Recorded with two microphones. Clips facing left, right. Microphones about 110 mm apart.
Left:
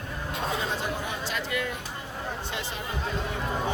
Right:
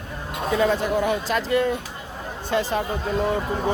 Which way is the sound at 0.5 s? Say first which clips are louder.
Right 10 dB; 75° right (ahead or behind).